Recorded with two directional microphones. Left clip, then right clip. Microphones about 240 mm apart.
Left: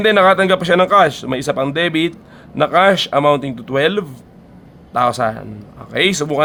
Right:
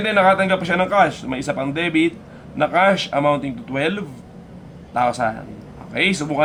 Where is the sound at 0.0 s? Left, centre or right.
Left.